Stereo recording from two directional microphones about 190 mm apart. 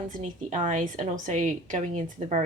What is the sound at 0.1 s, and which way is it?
A woman's voice, 40° right (ahead or behind).